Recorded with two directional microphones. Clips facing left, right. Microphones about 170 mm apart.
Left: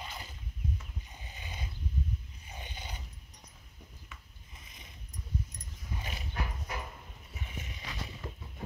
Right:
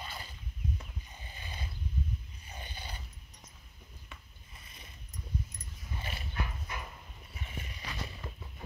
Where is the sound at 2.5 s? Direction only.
15° left (ahead or behind).